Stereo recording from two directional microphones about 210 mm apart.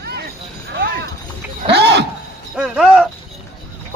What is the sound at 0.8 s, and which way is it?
Clip-clop, 55° right (ahead or behind).